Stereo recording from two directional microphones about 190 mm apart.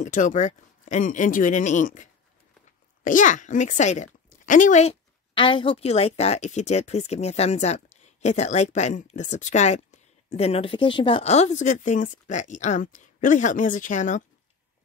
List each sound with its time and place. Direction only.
0.0 s speech: 40° left (ahead or behind)